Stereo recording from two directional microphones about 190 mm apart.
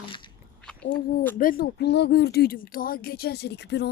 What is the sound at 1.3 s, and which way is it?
A woman's voice, 50° left (ahead or behind).